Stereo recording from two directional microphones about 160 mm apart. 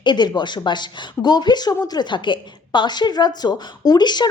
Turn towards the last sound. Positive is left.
turn(degrees=25)  # may be behind; listen again after turning